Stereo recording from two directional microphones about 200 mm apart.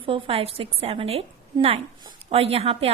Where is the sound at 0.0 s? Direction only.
25° right (ahead or behind).